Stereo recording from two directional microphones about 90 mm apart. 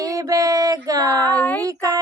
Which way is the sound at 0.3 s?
40° right (ahead or behind).